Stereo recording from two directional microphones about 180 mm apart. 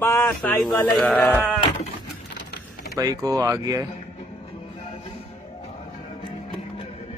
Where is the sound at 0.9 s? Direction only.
5° left (ahead or behind).